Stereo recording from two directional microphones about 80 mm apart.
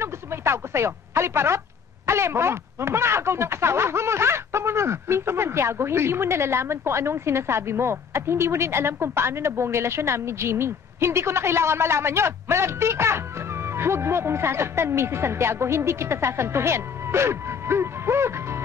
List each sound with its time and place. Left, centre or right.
0.0 s radio: right
2.0 s speech: right